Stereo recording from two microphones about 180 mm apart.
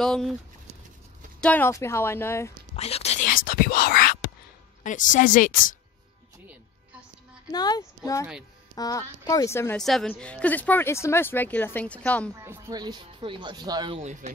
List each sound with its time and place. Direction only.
0.0 s speech: 5° left (ahead or behind)
1.4 s speech: 10° left (ahead or behind)
2.7 s whispering: 35° left (ahead or behind); by 4.3 s 55° left (ahead or behind)
4.8 s a woman's voice: 45° left (ahead or behind)
7.5 s a woman's voice: 20° left (ahead or behind)
9.8 s speech: centre (ahead or behind)
12.4 s speech: 15° right (ahead or behind)
13.9 s speech: 40° right (ahead or behind)